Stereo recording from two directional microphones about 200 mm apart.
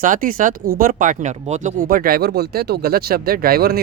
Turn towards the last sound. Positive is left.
turn(degrees=-50)  # may be behind; listen again after turning